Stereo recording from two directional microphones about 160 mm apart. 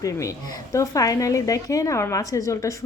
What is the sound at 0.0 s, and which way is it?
Speech, 20° left (ahead or behind).